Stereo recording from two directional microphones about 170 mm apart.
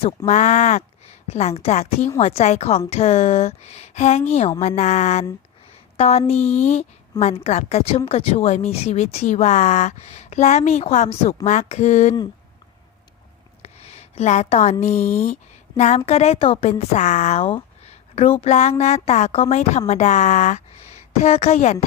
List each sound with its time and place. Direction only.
0.3 s a woman's voice: 45° left (ahead or behind)
13.6 s a woman's voice: 40° left (ahead or behind)